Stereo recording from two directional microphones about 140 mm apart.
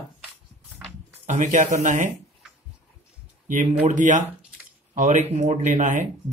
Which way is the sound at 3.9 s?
60° right (ahead or behind).